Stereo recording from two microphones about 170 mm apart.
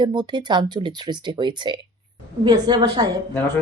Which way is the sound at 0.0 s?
25° right (ahead or behind).